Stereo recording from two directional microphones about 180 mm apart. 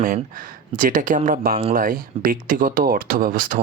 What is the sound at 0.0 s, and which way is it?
Speech, 50° right (ahead or behind).